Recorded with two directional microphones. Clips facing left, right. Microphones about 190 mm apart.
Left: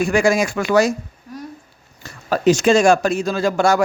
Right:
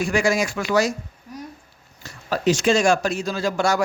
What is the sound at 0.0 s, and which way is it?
Speech, 50° left (ahead or behind).